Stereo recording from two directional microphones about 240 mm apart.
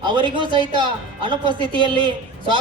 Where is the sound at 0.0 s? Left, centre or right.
Centre.